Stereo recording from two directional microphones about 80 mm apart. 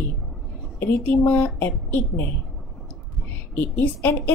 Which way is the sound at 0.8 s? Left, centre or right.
Left.